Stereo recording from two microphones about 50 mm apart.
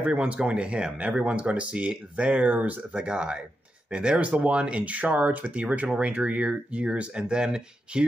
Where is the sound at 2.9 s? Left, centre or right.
Centre.